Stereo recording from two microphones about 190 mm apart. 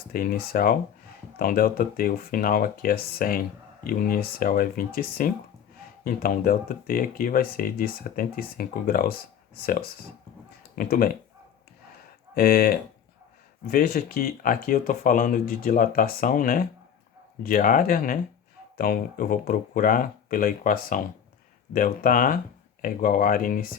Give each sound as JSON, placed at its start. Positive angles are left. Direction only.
{"t": 0.1, "sound": "speech", "side_deg": 50}
{"t": 10.8, "sound": "speech", "side_deg": 50}
{"t": 12.3, "sound": "speech", "side_deg": 50}